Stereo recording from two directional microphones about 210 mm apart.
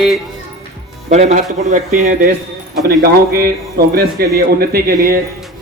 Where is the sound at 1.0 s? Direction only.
35° right (ahead or behind).